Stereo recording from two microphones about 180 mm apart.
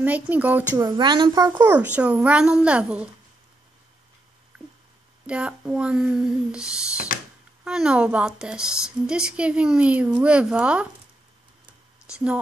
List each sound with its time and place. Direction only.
0.0 s a child's voice: 10° right (ahead or behind)
0.8 s a child's voice: 25° right (ahead or behind)
1.7 s a child's voice: 10° right (ahead or behind)
5.2 s a woman's voice: 5° right (ahead or behind)
7.1 s a sound: 50° left (ahead or behind)
7.6 s a woman's voice: 5° right (ahead or behind)
12.1 s a child's voice: 5° right (ahead or behind)